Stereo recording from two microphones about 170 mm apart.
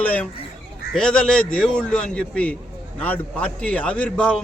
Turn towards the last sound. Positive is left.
turn(degrees=5)  # may be behind; listen again after turning